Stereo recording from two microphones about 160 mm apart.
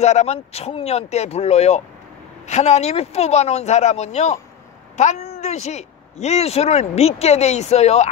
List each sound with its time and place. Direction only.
0.0 s speech: 45° left (ahead or behind)